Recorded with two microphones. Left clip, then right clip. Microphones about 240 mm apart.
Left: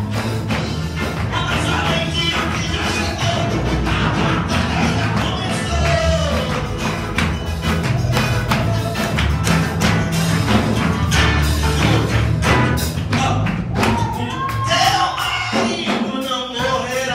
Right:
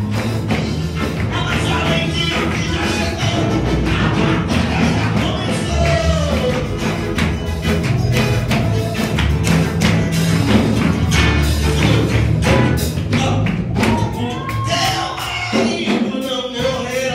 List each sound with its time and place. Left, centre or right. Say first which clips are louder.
10.1 s music: right 1 dB; centre